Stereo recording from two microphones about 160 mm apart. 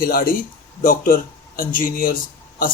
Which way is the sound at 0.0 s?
65° left (ahead or behind).